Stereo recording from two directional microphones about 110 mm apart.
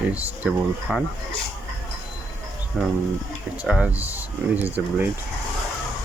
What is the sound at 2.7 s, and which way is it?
Speech, 5° right (ahead or behind).